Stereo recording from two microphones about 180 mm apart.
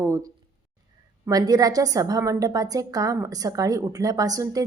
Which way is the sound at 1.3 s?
20° right (ahead or behind).